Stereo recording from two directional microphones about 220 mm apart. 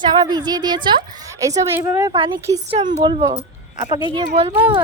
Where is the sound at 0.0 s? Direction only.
20° right (ahead or behind).